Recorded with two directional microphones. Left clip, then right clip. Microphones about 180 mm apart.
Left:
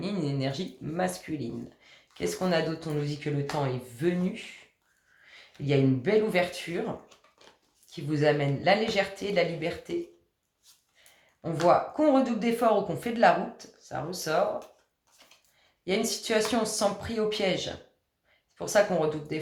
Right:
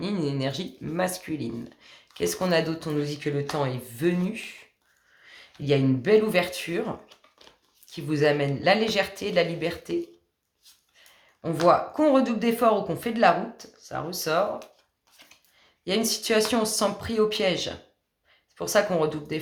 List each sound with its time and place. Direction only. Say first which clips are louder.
0.0 s speech: right 3 dB; 35° right (ahead or behind)
5.3 s speech: right 3 dB; 40° right (ahead or behind)
7.4 s a sound: right 2 dB; 25° right (ahead or behind)
7.9 s speech: right 3 dB; 40° right (ahead or behind)
11.7 s speech: right 2 dB; 35° right (ahead or behind)
15.2 s a sound: right 4 dB; 25° right (ahead or behind)
15.8 s speech: right 3 dB; 35° right (ahead or behind)